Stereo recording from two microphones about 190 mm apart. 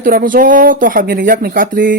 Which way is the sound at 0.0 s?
45° right (ahead or behind).